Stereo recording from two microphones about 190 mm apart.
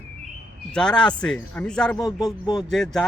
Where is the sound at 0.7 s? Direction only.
5° left (ahead or behind).